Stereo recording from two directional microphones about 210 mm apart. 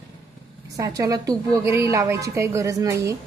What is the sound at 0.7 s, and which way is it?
A woman's voice, 15° right (ahead or behind).